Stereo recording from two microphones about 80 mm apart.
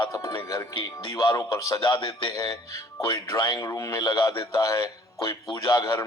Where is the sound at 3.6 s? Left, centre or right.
Left.